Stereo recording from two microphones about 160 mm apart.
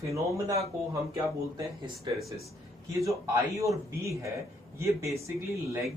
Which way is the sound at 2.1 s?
30° right (ahead or behind).